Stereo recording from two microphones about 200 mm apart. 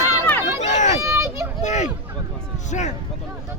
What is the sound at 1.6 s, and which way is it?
Speech, 35° left (ahead or behind).